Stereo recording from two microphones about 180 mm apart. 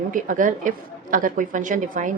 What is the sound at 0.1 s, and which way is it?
A woman's voice, 45° right (ahead or behind).